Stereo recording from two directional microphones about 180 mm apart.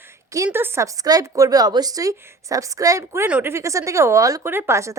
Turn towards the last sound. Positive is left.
turn(degrees=-15)  # may be behind; listen again after turning